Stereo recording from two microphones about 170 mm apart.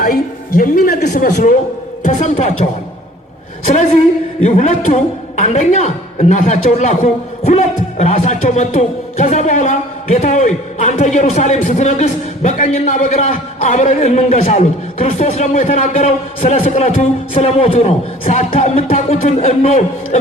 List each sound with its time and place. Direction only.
0.0 s a man's voice: 55° left (ahead or behind); by 2.6 s 40° left (ahead or behind)
4.4 s a man's voice: 45° left (ahead or behind)